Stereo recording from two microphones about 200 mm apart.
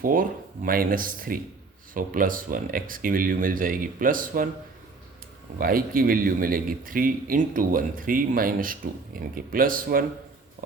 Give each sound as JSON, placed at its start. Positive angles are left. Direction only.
{"t": 0.0, "sound": "speech", "side_deg": -45}
{"t": 5.5, "sound": "speech", "side_deg": -45}